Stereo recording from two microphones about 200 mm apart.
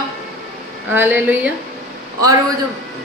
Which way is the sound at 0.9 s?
10° right (ahead or behind).